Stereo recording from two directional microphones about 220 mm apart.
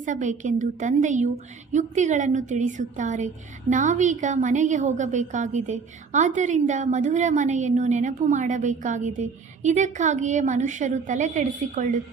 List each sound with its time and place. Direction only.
0.0 s a woman's voice: 35° right (ahead or behind)